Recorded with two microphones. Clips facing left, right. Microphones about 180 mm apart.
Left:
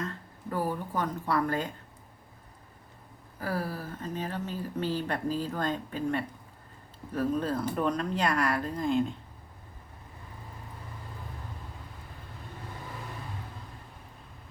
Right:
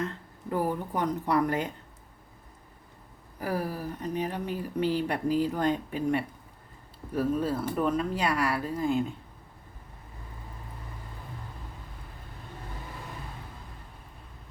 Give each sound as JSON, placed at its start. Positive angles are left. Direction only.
{"t": 0.0, "sound": "speech", "side_deg": -20}
{"t": 3.4, "sound": "speech", "side_deg": -15}